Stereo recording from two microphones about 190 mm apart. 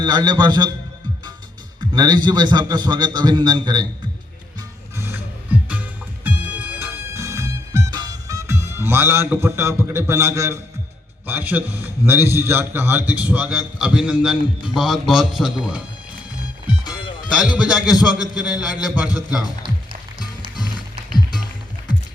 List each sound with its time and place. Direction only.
0.0 s a man's voice: 20° right (ahead or behind)
1.9 s a man's voice: 20° right (ahead or behind)
4.9 s music: 10° right (ahead or behind)
11.3 s a man's voice: 10° right (ahead or behind)
16.9 s music: 5° right (ahead or behind)
17.9 s a man's voice: 20° left (ahead or behind)
18.9 s a man's voice: centre (ahead or behind)